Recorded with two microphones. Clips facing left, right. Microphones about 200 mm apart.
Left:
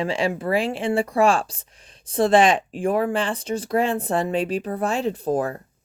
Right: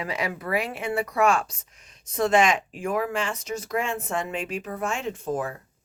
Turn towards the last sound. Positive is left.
turn(degrees=35)  # may be behind; listen again after turning